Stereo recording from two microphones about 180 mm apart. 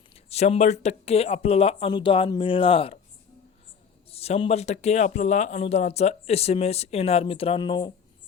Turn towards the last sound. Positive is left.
turn(degrees=25)  # may be behind; listen again after turning